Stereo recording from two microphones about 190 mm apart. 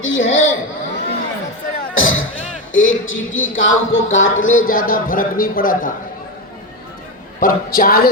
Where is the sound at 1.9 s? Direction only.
90° left.